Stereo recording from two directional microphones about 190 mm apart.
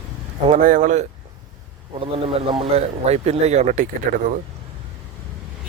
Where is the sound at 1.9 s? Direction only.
30° right (ahead or behind).